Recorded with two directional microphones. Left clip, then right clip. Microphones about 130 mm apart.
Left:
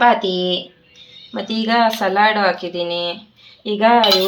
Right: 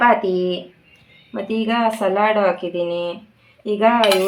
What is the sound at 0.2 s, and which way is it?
Speech, 10° left (ahead or behind).